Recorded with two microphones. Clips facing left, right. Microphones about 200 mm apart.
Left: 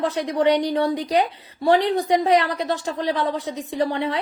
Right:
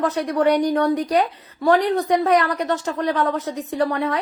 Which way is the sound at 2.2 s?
30° left (ahead or behind).